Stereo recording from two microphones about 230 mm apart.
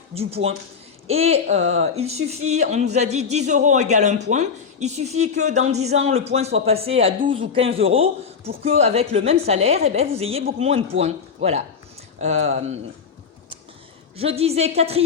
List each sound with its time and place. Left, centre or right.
0.1 s speech: right
14.2 s speech: right